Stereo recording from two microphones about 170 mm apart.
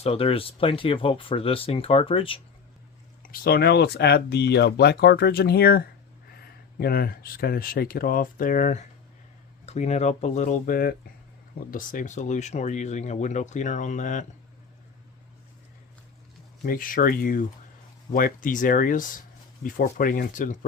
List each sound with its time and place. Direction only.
0.0 s speech: 35° left (ahead or behind)
3.2 s speech: 65° left (ahead or behind); by 14.3 s 45° left (ahead or behind)
16.6 s speech: 55° left (ahead or behind)